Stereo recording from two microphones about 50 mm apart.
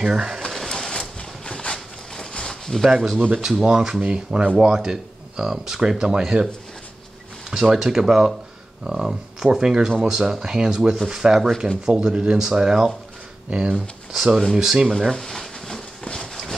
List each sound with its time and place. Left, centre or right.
0.0 s speech: centre
0.7 s a sound: centre
3.0 s speech: centre
3.6 s speech: centre
7.5 s speech: centre
11.4 s speech: centre
11.8 s speech: centre
14.1 s speech: centre
15.0 s a sound: centre